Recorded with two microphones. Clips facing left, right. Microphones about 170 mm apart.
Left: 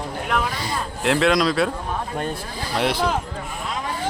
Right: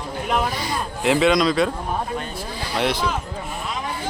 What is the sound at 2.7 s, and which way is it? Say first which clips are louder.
Speech: even; centre (ahead or behind).